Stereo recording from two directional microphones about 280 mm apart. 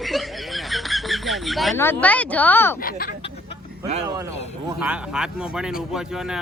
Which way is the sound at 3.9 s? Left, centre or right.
Right.